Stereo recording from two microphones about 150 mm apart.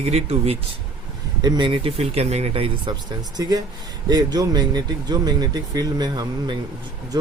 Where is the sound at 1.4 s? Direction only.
30° right (ahead or behind).